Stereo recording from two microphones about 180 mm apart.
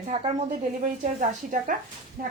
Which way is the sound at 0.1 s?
30° right (ahead or behind).